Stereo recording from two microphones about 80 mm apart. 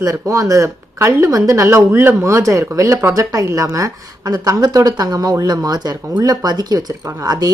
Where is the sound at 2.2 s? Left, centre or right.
Right.